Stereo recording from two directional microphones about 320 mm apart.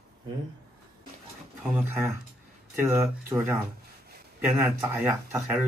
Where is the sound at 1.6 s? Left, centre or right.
Centre.